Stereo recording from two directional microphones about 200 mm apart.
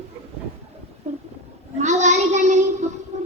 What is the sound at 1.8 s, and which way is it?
Child singing, 35° right (ahead or behind).